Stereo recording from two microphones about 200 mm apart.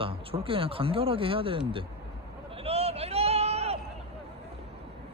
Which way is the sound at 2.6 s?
30° right (ahead or behind).